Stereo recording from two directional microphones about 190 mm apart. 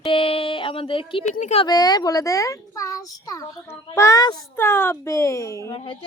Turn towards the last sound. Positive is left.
turn(degrees=15)  # may be behind; listen again after turning